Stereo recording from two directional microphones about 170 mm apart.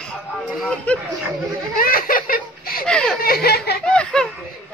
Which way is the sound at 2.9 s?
5° left (ahead or behind).